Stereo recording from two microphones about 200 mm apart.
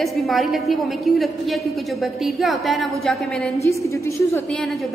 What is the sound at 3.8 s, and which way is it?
Speech, 15° left (ahead or behind).